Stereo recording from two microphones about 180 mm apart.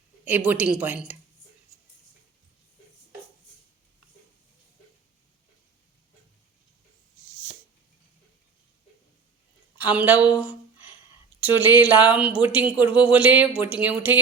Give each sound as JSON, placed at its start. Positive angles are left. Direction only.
{"t": 0.3, "sound": "speech", "side_deg": -10}
{"t": 9.7, "sound": "a woman's voice", "side_deg": -10}